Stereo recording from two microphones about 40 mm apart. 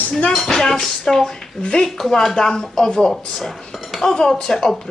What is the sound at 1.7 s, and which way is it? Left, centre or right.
Speech, left.